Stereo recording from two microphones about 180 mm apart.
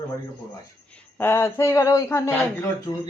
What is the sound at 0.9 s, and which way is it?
Speech, 10° left (ahead or behind).